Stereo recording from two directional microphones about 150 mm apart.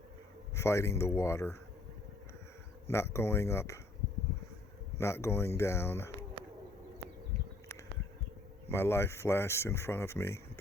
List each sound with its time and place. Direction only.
0.5 s speech: 20° left (ahead or behind)
2.8 s speech: 20° left (ahead or behind)
4.9 s speech: 20° left (ahead or behind)
8.7 s speech: 15° left (ahead or behind)